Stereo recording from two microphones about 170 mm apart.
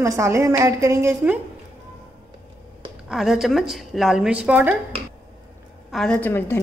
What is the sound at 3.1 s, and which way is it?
A woman's voice, centre (ahead or behind).